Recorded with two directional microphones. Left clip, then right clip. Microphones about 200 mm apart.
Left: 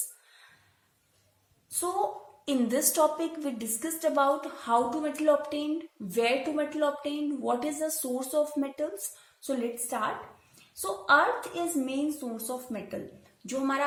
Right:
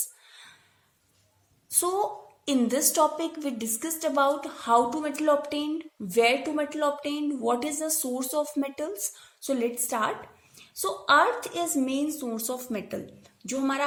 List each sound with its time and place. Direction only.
2.4 s a woman's voice: 25° right (ahead or behind)
13.4 s a woman's voice: 25° right (ahead or behind)